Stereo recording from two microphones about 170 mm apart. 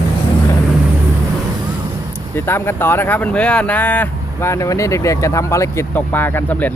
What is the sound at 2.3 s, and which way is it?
Speech, 15° left (ahead or behind).